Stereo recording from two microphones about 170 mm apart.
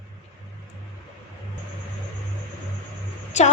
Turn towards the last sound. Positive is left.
turn(degrees=40)  # may be behind; listen again after turning